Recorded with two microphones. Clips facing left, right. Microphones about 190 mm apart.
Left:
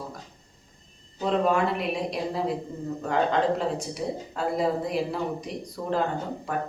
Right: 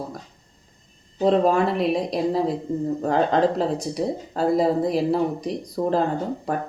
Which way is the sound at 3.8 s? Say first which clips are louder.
Right 5 dB; 35° right (ahead or behind).